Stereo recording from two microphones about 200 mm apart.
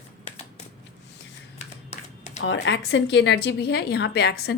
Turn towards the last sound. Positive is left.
turn(degrees=55)  # may be behind; listen again after turning